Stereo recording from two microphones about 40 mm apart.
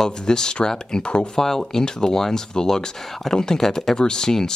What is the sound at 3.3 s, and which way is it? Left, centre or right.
Speech, centre.